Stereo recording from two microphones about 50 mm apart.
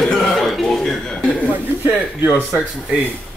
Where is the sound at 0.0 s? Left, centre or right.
Centre.